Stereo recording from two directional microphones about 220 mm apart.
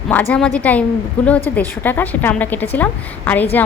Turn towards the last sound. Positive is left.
turn(degrees=10)  # may be behind; listen again after turning